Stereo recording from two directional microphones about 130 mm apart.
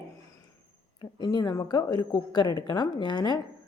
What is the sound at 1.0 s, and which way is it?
A woman's voice, 30° left (ahead or behind).